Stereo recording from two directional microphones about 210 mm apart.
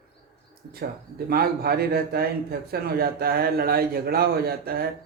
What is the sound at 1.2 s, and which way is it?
A man's voice, 45° right (ahead or behind).